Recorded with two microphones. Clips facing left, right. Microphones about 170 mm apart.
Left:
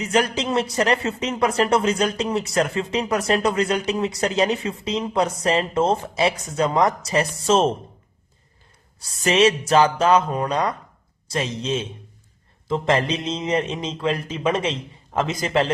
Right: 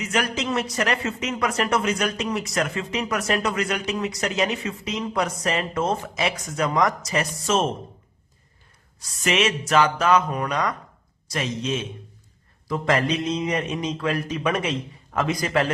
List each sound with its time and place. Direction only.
0.0 s speech: 30° left (ahead or behind)
9.0 s a man's voice: 30° left (ahead or behind)